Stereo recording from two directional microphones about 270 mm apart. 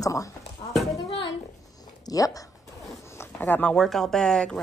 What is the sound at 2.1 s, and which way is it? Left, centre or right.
A woman's voice, centre.